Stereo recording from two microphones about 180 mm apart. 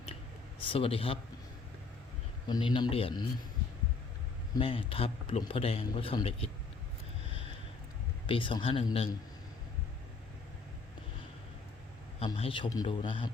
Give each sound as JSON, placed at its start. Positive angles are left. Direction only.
{"t": 0.6, "sound": "a man's voice", "side_deg": 30}
{"t": 2.5, "sound": "a man's voice", "side_deg": 25}
{"t": 4.5, "sound": "a man's voice", "side_deg": 30}
{"t": 8.3, "sound": "a man's voice", "side_deg": 30}
{"t": 12.2, "sound": "a man's voice", "side_deg": 30}